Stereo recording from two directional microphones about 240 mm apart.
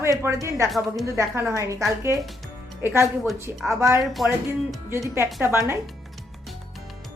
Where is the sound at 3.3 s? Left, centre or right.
Centre.